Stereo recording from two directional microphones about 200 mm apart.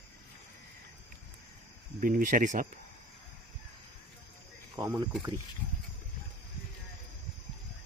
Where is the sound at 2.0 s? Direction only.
45° right (ahead or behind).